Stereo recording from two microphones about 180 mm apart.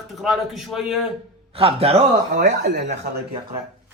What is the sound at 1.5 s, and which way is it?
Speech, 30° right (ahead or behind).